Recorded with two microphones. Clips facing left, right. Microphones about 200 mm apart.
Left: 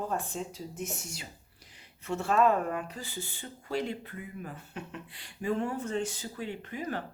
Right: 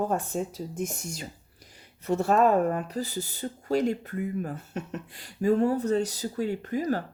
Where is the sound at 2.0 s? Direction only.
40° right (ahead or behind).